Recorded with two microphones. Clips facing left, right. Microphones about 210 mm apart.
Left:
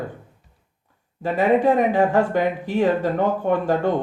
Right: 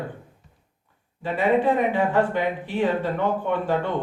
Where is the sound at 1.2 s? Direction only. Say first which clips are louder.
Left 3 dB; 45° left (ahead or behind).